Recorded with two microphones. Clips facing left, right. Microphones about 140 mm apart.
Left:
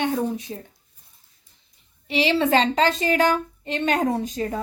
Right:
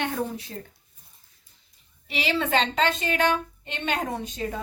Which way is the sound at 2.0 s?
30° left (ahead or behind).